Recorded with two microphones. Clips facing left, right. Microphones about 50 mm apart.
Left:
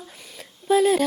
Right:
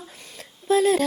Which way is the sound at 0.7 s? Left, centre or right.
Centre.